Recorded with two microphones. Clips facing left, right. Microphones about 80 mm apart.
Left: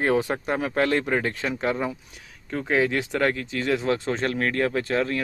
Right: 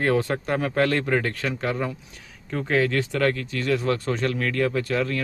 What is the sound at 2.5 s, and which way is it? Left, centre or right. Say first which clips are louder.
Speech: even; centre.